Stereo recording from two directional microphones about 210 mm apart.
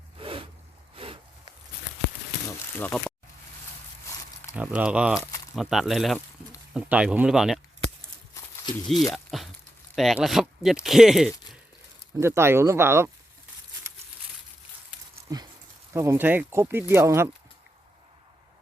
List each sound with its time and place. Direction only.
0.2 s zipper: 25° right (ahead or behind)
0.9 s a sound: 25° right (ahead or behind)
2.7 s speech: 10° left (ahead or behind)
4.1 s a sound: 15° left (ahead or behind)
4.5 s speech: 5° right (ahead or behind)
8.9 s speech: centre (ahead or behind)
12.1 s speech: 10° right (ahead or behind)
15.3 s speech: 15° right (ahead or behind)